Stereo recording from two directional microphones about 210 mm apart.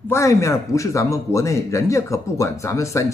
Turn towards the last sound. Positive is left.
turn(degrees=15)  # may be behind; listen again after turning